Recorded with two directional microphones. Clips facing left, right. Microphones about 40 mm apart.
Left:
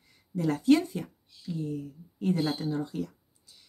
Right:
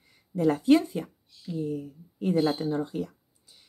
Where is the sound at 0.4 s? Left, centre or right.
Right.